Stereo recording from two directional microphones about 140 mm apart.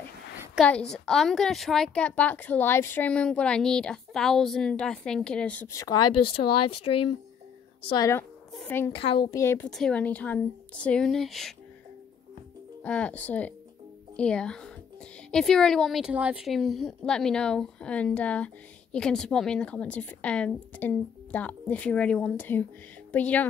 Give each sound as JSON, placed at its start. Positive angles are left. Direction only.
{"t": 0.6, "sound": "a woman's voice", "side_deg": 5}
{"t": 5.7, "sound": "a woman's voice", "side_deg": 25}
{"t": 6.3, "sound": "a woman's voice", "side_deg": 40}
{"t": 8.6, "sound": "a woman's voice", "side_deg": 15}
{"t": 8.9, "sound": "speech", "side_deg": 40}
{"t": 9.3, "sound": "a woman's voice", "side_deg": 20}
{"t": 9.7, "sound": "a woman's voice", "side_deg": 5}
{"t": 12.8, "sound": "a woman's voice", "side_deg": 10}